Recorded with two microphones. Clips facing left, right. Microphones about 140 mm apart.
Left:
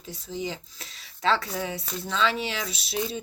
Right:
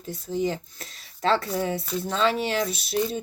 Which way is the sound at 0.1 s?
50° right (ahead or behind).